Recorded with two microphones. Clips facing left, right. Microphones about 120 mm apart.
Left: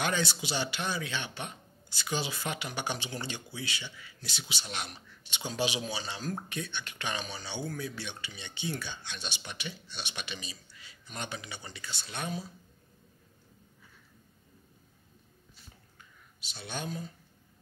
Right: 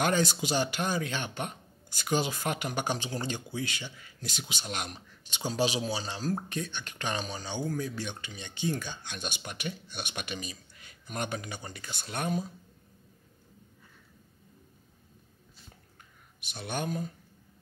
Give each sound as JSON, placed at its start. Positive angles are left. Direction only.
{"t": 0.0, "sound": "speech", "side_deg": -45}
{"t": 16.3, "sound": "speech", "side_deg": -55}